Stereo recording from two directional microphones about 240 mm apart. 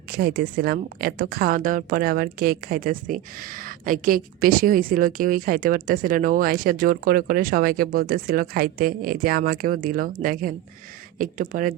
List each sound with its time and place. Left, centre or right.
0.1 s a woman's voice: right